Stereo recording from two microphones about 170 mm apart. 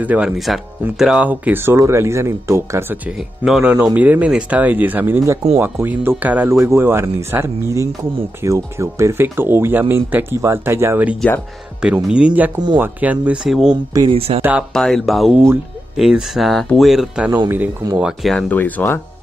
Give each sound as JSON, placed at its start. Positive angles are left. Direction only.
{"t": 0.0, "sound": "speech", "side_deg": -5}
{"t": 3.4, "sound": "speech", "side_deg": -5}
{"t": 11.1, "sound": "speech", "side_deg": 10}
{"t": 11.8, "sound": "speech", "side_deg": -5}
{"t": 13.9, "sound": "speech", "side_deg": -30}
{"t": 14.7, "sound": "speech", "side_deg": 0}